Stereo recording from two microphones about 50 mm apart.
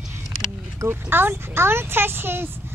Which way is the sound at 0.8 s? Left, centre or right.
Right.